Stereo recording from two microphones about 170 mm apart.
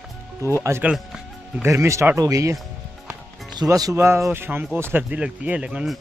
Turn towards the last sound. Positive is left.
turn(degrees=-5)  # may be behind; listen again after turning